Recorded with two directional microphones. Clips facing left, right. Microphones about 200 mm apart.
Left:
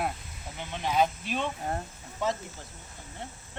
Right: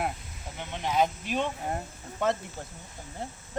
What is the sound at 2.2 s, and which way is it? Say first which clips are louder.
Cricket: right 3 dB; 55° right (ahead or behind).